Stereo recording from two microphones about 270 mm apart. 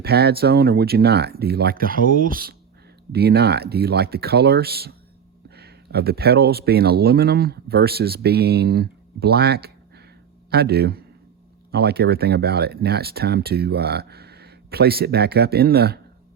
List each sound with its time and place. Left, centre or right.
0.0 s speech: right